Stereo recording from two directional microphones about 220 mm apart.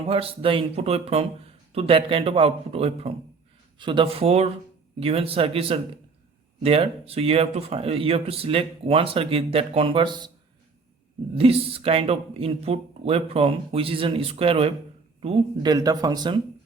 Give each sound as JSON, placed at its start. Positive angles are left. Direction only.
{"t": 0.1, "sound": "speech", "side_deg": -25}
{"t": 11.3, "sound": "speech", "side_deg": -25}
{"t": 15.7, "sound": "speech", "side_deg": -15}